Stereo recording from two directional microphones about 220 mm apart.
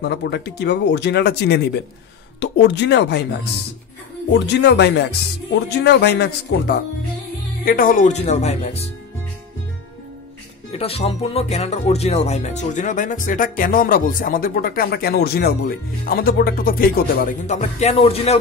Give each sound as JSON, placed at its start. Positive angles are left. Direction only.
{"t": 0.0, "sound": "speech", "side_deg": 50}
{"t": 4.3, "sound": "speech", "side_deg": 50}
{"t": 10.7, "sound": "speech", "side_deg": 25}